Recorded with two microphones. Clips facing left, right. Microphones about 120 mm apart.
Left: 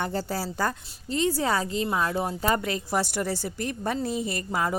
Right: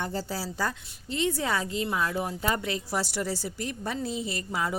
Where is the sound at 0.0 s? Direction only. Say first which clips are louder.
Left 3 dB; 60° left (ahead or behind).